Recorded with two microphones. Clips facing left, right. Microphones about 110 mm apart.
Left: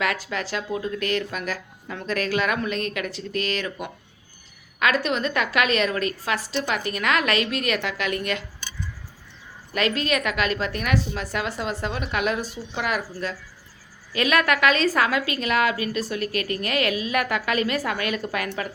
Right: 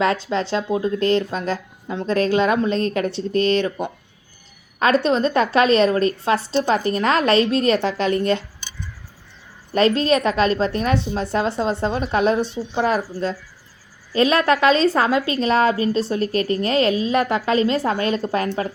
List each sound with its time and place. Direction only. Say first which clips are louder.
0.0 s a woman's voice: right 7 dB; 30° right (ahead or behind)
9.7 s a woman's voice: right 7 dB; 35° right (ahead or behind)